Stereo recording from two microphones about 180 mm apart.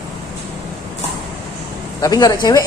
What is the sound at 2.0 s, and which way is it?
Speech, 20° left (ahead or behind).